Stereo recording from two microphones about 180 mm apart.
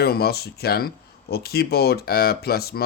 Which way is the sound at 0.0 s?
60° left (ahead or behind).